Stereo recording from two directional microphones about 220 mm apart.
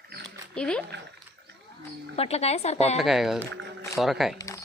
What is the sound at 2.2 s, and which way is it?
Speech, 30° left (ahead or behind).